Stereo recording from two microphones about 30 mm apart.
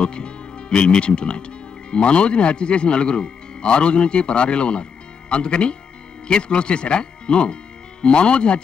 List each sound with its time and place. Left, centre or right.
0.0 s speech: left